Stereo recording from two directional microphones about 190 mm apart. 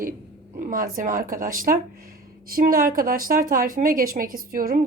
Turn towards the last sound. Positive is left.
turn(degrees=-50)  # may be behind; listen again after turning